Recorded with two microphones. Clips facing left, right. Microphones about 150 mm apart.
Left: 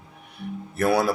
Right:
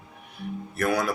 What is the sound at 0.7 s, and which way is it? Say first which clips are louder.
Speech: left 4 dB; 30° left (ahead or behind).